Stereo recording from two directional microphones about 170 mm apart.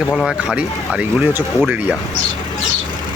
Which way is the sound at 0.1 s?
Centre (ahead or behind).